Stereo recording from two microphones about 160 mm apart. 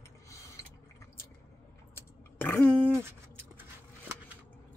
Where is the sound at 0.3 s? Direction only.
20° left (ahead or behind).